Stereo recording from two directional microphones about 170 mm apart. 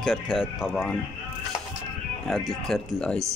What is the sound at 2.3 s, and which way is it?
Speech, centre (ahead or behind).